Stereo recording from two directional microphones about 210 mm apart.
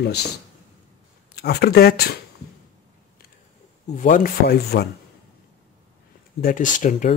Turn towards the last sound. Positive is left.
turn(degrees=35)  # may be behind; listen again after turning